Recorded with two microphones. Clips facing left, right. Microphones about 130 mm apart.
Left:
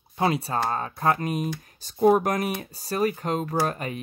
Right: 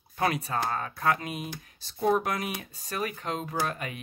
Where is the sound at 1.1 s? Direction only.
40° left (ahead or behind).